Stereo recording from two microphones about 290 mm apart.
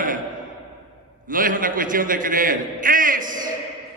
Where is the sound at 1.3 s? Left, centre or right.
Right.